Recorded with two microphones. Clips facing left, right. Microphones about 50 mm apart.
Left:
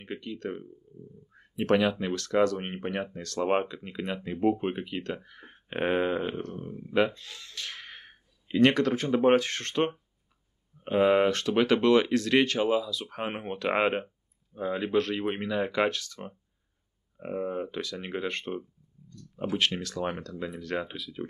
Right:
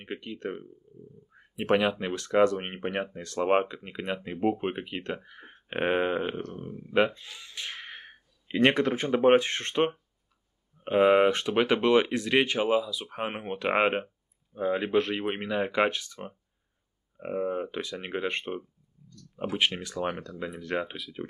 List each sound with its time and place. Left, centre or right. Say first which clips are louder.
0.2 s speech: even; centre
0.9 s a sound: left 1 dB; centre
1.3 s speech: even; centre
5.5 s speech: right 1 dB; centre; by 21.3 s right